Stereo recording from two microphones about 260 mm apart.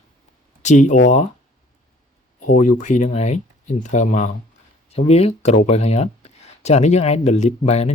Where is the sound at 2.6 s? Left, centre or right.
Left.